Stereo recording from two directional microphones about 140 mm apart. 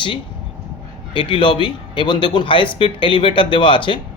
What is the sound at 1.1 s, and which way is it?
Speech, 35° left (ahead or behind).